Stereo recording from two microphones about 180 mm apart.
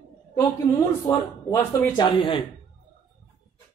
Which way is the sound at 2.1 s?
30° left (ahead or behind).